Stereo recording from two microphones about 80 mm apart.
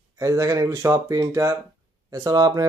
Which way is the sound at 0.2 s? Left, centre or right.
Right.